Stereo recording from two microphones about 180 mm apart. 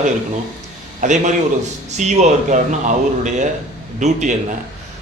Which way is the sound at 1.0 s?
45° right (ahead or behind).